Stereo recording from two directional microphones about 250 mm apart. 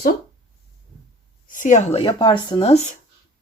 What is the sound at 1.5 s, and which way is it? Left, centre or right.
Speech, left.